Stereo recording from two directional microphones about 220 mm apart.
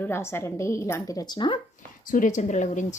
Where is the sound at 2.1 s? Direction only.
35° left (ahead or behind).